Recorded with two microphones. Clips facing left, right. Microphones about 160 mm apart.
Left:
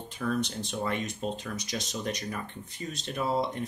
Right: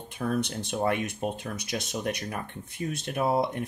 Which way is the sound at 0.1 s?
60° right (ahead or behind).